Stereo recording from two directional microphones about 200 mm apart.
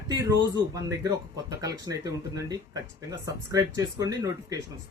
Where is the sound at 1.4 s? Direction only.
15° right (ahead or behind).